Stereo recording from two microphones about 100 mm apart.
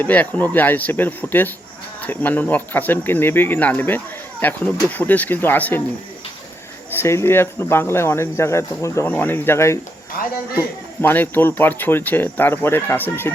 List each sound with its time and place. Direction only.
0.0 s speech: 15° left (ahead or behind)
6.9 s speech: 25° left (ahead or behind)
11.0 s speech: 20° left (ahead or behind)